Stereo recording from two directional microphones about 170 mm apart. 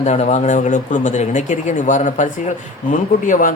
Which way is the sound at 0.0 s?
40° left (ahead or behind).